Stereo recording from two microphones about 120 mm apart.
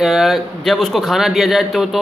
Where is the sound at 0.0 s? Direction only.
Centre (ahead or behind).